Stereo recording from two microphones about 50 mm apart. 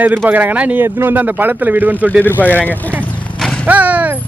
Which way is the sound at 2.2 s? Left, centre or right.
Left.